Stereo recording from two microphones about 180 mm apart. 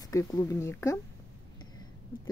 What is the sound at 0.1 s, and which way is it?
Speech, 20° left (ahead or behind).